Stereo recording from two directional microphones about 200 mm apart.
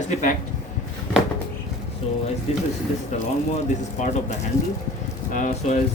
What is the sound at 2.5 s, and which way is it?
Speech, 30° left (ahead or behind).